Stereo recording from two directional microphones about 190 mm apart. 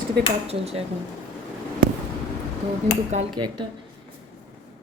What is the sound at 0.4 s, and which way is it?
Speech, 35° right (ahead or behind).